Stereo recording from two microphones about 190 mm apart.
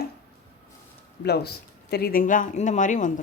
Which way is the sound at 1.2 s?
60° left (ahead or behind).